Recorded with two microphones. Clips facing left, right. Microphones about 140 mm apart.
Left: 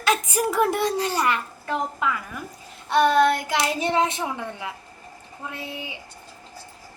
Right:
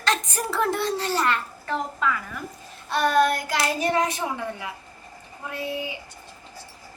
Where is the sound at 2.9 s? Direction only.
20° left (ahead or behind).